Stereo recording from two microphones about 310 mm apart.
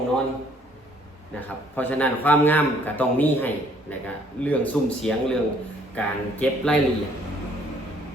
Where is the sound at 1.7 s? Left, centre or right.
Centre.